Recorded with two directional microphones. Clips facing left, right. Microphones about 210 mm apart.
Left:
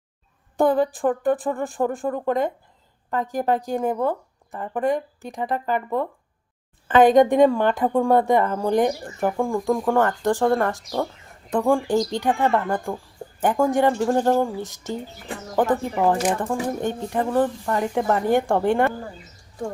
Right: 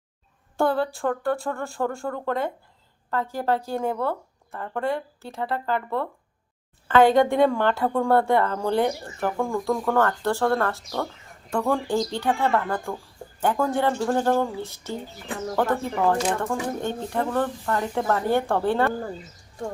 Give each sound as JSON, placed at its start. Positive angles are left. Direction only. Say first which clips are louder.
{"t": 0.5, "sound": "a woman's voice", "louder": "left 4 dB", "side_deg": 15}